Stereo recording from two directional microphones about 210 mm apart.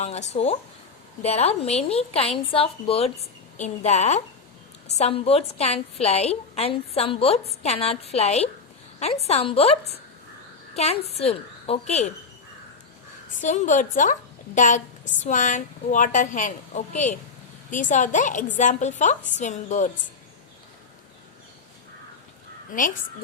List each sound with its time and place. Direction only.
0.0 s a woman's voice: 30° left (ahead or behind)
13.4 s a woman's voice: 35° left (ahead or behind)
22.7 s a woman's voice: 40° left (ahead or behind)